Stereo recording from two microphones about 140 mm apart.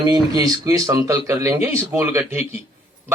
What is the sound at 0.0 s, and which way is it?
A man's voice, 30° right (ahead or behind).